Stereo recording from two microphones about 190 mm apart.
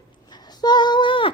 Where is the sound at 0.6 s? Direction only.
20° left (ahead or behind).